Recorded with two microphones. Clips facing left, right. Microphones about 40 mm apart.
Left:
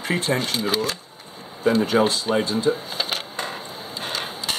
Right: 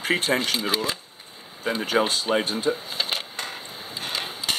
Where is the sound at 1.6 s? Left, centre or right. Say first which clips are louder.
Left 5 dB; centre.